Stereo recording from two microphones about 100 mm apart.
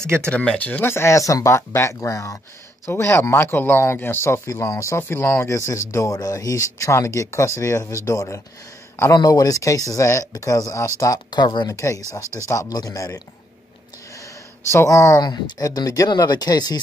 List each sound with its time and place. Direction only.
0.0 s speech: 25° right (ahead or behind)
0.3 s speech: 10° left (ahead or behind); by 5.0 s 30° left (ahead or behind)
5.0 s speech: 20° left (ahead or behind)
5.5 s speech: 30° left (ahead or behind)
11.2 s speech: 45° left (ahead or behind)
14.7 s speech: 30° left (ahead or behind)
15.2 s speech: 45° left (ahead or behind)